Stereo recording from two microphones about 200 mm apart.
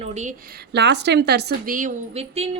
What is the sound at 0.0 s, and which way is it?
A woman's voice, 35° right (ahead or behind).